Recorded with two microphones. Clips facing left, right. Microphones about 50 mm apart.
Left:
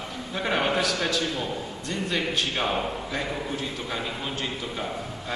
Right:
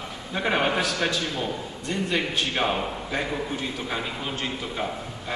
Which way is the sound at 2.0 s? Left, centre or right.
Centre.